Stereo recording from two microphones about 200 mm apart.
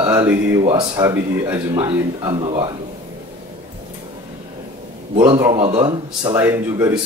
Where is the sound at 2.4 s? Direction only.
25° right (ahead or behind).